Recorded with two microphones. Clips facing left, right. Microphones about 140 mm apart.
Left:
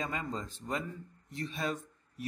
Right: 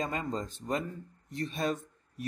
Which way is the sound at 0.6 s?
30° right (ahead or behind).